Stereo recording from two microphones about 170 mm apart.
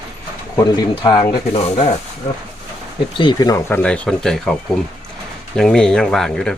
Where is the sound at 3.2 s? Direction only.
25° left (ahead or behind).